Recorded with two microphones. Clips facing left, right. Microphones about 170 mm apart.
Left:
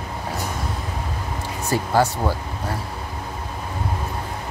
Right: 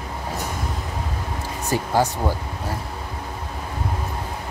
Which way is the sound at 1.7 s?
15° right (ahead or behind).